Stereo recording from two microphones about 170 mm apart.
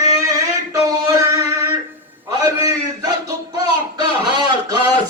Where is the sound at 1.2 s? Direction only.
20° right (ahead or behind).